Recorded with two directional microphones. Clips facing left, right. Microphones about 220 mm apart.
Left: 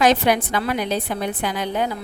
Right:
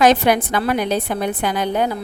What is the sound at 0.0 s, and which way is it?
A woman's voice, 50° right (ahead or behind).